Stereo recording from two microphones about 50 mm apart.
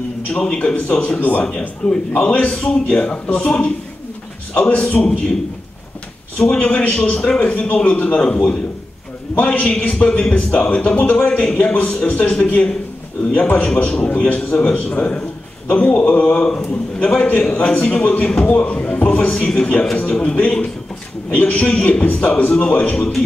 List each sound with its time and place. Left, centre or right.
0.3 s a man's voice: centre
1.8 s a man's voice: centre
4.6 s a man's voice: left
6.6 s a man's voice: left
16.2 s a man's voice: left